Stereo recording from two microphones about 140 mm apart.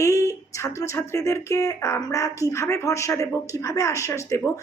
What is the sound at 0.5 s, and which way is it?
Speech, 20° left (ahead or behind).